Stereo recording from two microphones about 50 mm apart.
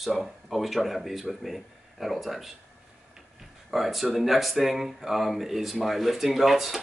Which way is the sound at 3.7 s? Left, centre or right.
Centre.